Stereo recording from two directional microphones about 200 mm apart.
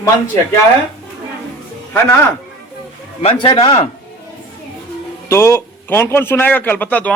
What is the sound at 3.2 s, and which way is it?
Speech, 30° left (ahead or behind).